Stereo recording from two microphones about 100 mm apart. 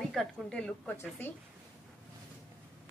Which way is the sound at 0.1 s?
5° left (ahead or behind).